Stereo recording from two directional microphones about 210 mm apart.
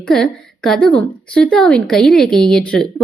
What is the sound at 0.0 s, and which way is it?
A woman's voice, 5° left (ahead or behind).